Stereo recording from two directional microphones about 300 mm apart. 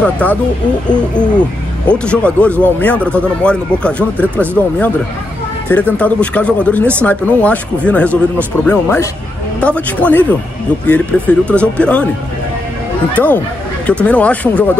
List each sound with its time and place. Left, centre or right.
0.0 s speech: centre
1.9 s speech: centre
13.8 s speech: centre